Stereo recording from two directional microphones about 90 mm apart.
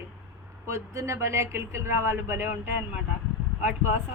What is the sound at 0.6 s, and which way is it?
Speech, 30° right (ahead or behind).